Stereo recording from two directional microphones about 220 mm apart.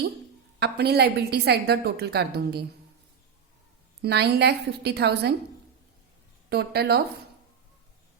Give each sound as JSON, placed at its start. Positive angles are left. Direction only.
{"t": 0.6, "sound": "a woman's voice", "side_deg": -45}
{"t": 4.0, "sound": "a woman's voice", "side_deg": -45}
{"t": 6.5, "sound": "a woman's voice", "side_deg": -45}